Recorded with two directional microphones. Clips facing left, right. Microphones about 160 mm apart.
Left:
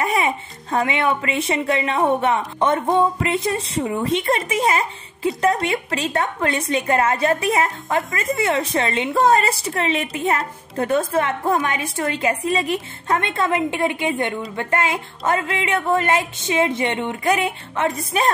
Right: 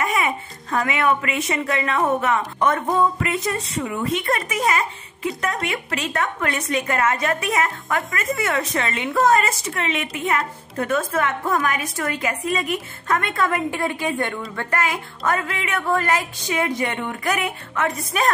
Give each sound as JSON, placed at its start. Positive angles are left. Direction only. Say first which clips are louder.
{"t": 0.0, "sound": "speech", "louder": "left 2 dB", "side_deg": 30}